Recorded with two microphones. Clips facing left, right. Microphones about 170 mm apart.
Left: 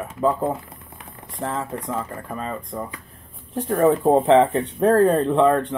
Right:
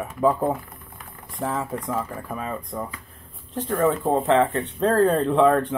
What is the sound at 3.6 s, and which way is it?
Speech, 15° left (ahead or behind).